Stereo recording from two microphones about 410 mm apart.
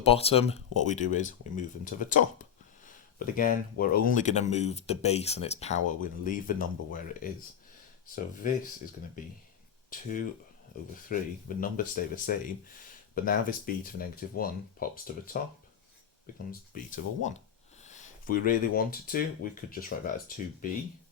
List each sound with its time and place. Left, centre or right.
0.0 s speech: centre
10.9 s speech: centre
16.5 s speech: centre